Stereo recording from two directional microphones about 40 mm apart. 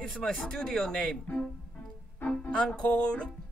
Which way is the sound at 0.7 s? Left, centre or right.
Centre.